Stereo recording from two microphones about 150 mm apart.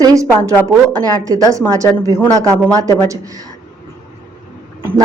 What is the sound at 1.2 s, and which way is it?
A woman's voice, 20° right (ahead or behind).